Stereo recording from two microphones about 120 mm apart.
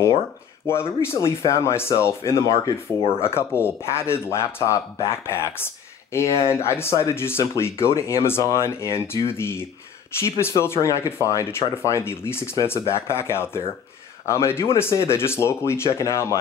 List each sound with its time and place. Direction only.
0.7 s speech: 20° left (ahead or behind)